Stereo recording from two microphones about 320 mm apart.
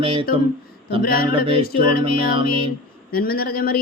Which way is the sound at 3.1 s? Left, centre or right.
Left.